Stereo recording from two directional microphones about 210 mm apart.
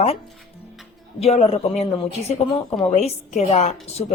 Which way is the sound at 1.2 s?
30° left (ahead or behind).